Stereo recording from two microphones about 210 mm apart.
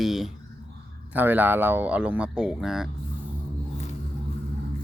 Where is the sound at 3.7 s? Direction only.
35° left (ahead or behind).